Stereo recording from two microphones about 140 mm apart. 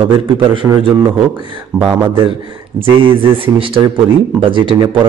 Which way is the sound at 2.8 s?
40° right (ahead or behind).